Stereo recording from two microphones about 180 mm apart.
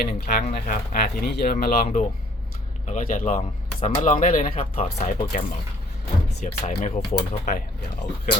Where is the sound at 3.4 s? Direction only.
30° left (ahead or behind).